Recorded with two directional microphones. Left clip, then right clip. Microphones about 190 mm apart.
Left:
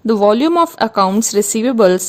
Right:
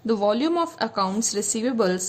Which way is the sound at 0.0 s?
40° left (ahead or behind).